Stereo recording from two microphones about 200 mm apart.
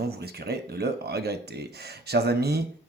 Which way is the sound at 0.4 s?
55° right (ahead or behind).